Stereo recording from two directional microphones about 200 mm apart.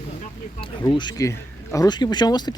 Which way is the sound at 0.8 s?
20° left (ahead or behind).